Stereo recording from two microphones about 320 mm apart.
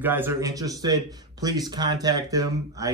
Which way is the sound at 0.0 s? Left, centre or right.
Centre.